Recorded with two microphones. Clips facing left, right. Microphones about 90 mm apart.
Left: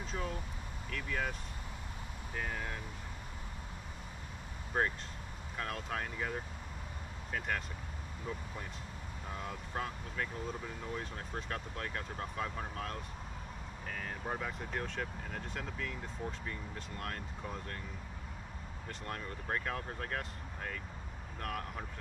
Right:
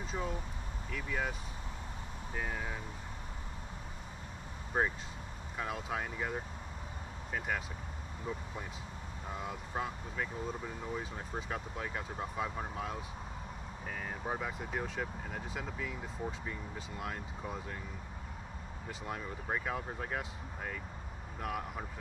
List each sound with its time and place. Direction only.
0.0 s speech: 5° right (ahead or behind)
2.3 s speech: 5° right (ahead or behind)
4.7 s speech: 5° right (ahead or behind)
9.3 s speech: 5° right (ahead or behind)
18.9 s speech: 5° right (ahead or behind)